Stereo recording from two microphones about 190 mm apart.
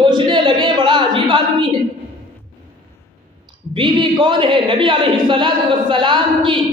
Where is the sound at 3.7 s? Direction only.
25° right (ahead or behind).